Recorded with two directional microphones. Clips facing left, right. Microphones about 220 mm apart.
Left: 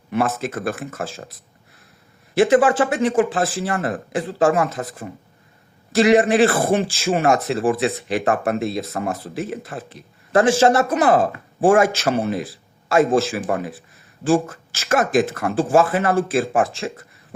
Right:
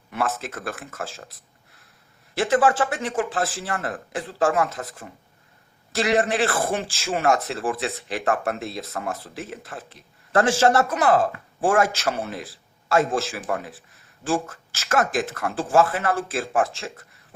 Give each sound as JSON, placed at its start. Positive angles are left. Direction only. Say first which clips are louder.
{"t": 0.1, "sound": "speech", "louder": "left 6 dB", "side_deg": 15}
{"t": 2.3, "sound": "speech", "louder": "left 5 dB", "side_deg": 15}